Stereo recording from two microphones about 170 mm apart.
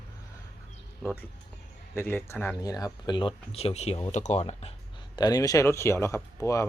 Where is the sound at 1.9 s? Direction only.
15° left (ahead or behind); by 4.7 s 35° left (ahead or behind).